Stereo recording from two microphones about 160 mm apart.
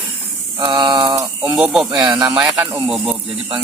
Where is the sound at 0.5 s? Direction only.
25° right (ahead or behind).